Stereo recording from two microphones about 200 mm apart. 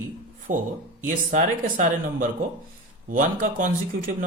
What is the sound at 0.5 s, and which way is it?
Speech, 40° right (ahead or behind).